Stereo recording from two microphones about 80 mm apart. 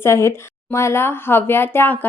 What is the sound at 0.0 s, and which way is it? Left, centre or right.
Speech, left.